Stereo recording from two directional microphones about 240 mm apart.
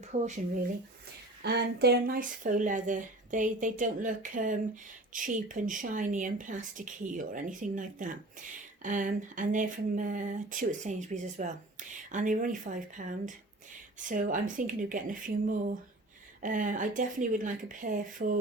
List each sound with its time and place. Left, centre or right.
0.1 s speech: right
1.4 s speech: right